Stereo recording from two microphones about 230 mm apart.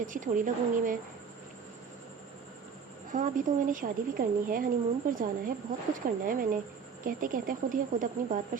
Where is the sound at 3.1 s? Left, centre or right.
Right.